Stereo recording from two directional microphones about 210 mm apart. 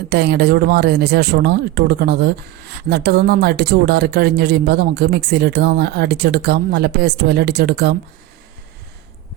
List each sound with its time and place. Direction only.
0.1 s speech: 50° right (ahead or behind)